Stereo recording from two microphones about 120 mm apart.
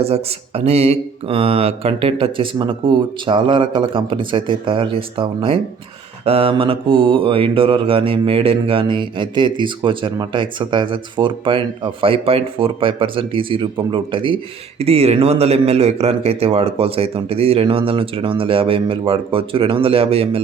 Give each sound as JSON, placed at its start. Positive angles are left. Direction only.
{"t": 0.0, "sound": "mantra", "side_deg": -55}
{"t": 14.8, "sound": "mantra", "side_deg": -55}